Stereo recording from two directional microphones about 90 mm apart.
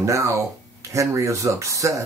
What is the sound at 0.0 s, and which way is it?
Speech, 35° right (ahead or behind).